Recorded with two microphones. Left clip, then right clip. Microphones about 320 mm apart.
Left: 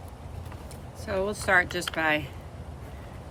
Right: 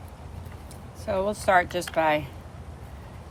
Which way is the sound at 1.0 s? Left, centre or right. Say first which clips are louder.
Right 3 dB; centre.